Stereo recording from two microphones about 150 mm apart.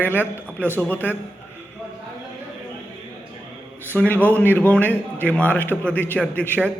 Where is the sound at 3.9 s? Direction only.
10° left (ahead or behind).